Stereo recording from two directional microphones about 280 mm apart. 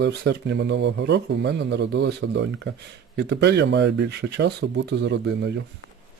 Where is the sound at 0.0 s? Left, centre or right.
Right.